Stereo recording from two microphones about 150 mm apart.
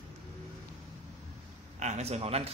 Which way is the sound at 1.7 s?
50° right (ahead or behind).